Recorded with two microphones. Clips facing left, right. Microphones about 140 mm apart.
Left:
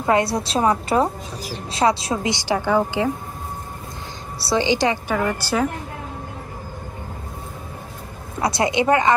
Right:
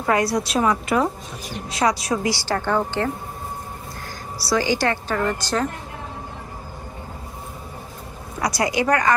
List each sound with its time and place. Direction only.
0.0 s a woman's voice: 25° left (ahead or behind)
4.4 s a woman's voice: 25° left (ahead or behind); by 5.7 s 10° left (ahead or behind)
8.4 s a woman's voice: 25° left (ahead or behind)